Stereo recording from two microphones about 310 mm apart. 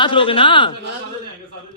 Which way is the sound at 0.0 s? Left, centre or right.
Centre.